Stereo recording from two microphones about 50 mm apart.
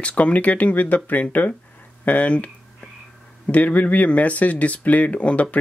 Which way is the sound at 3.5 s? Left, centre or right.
Left.